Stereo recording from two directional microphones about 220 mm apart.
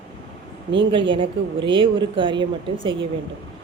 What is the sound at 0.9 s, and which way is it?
A woman's voice, 20° right (ahead or behind).